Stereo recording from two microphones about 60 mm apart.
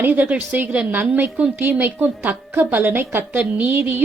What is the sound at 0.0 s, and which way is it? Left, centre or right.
A woman's voice, right.